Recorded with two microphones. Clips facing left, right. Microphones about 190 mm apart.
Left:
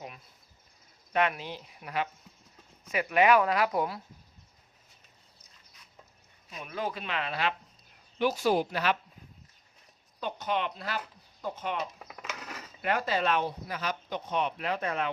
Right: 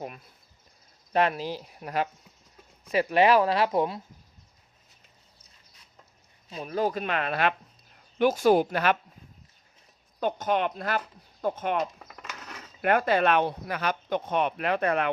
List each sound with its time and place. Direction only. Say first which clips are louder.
1.1 s speech: right 4 dB; 35° right (ahead or behind)
6.5 s speech: right 7 dB; 35° right (ahead or behind); by 9.0 s 55° right (ahead or behind)
10.2 s speech: right 6 dB; 50° right (ahead or behind)
12.0 s a sound: left 2 dB; 5° left (ahead or behind)
12.8 s speech: right 6 dB; 55° right (ahead or behind)